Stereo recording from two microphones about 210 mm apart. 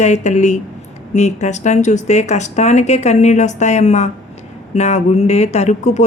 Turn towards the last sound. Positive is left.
turn(degrees=35)  # may be behind; listen again after turning